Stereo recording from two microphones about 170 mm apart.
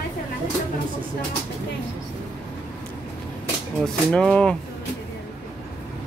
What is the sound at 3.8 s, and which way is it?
Speech, 5° left (ahead or behind).